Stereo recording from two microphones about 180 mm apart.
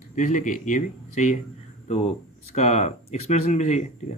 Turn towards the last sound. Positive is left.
turn(degrees=40)  # may be behind; listen again after turning